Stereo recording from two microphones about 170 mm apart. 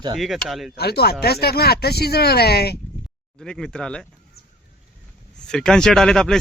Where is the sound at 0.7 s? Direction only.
70° left (ahead or behind).